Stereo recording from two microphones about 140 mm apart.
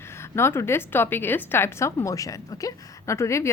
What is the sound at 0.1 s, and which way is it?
A woman's voice, 20° left (ahead or behind).